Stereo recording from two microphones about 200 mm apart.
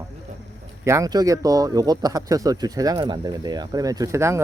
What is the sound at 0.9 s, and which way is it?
Speech, 15° right (ahead or behind).